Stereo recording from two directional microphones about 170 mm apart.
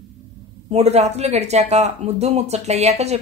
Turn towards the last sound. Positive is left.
turn(degrees=-40)  # may be behind; listen again after turning